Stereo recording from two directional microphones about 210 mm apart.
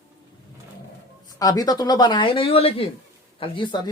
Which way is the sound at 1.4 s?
15° left (ahead or behind).